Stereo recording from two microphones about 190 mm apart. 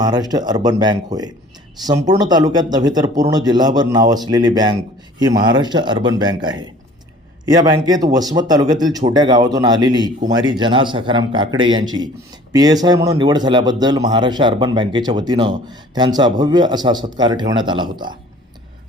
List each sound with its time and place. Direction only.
0.0 s speech: 20° right (ahead or behind)